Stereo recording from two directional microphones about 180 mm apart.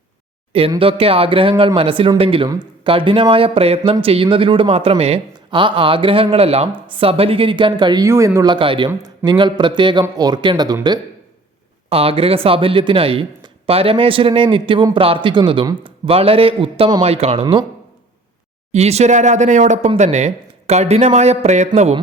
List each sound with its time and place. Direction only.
0.8 s speech: 30° right (ahead or behind)
8.5 s speech: 30° right (ahead or behind)
11.9 s speech: 30° right (ahead or behind)
18.7 s speech: 35° right (ahead or behind)